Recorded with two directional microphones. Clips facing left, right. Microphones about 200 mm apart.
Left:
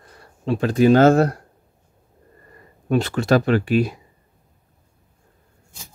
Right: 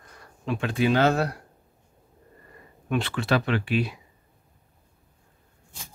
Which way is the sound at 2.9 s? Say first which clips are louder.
Left 7 dB; 40° left (ahead or behind).